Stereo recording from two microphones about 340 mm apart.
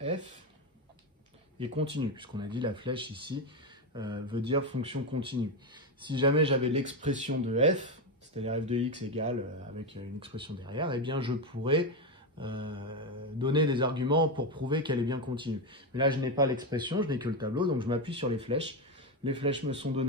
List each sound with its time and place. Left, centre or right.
1.6 s a man's voice: centre